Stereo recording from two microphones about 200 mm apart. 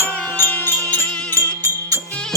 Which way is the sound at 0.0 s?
10° left (ahead or behind).